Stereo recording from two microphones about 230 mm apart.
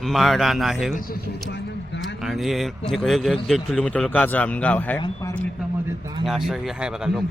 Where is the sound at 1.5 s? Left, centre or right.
Left.